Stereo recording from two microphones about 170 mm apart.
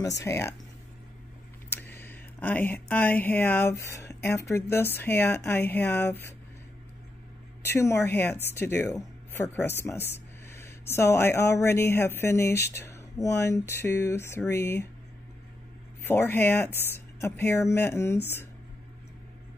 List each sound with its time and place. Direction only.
0.2 s speech: 15° left (ahead or behind)
1.7 s speech: 10° left (ahead or behind)
7.6 s speech: 15° left (ahead or behind)
16.0 s speech: 10° left (ahead or behind)